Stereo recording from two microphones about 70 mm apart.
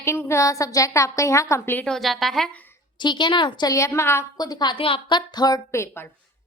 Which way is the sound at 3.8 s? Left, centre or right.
Left.